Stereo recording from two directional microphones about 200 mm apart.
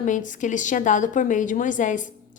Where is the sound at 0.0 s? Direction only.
40° left (ahead or behind).